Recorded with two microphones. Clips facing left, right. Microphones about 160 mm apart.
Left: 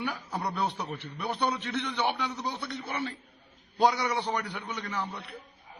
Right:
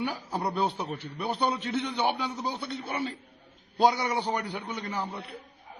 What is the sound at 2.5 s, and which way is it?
Speech, 30° right (ahead or behind).